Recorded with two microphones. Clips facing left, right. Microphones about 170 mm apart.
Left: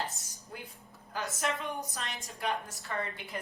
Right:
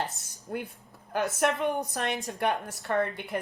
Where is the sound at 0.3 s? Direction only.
65° right (ahead or behind).